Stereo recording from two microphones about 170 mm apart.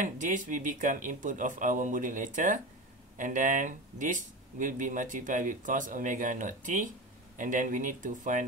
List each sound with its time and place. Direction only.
0.0 s speech: 50° right (ahead or behind)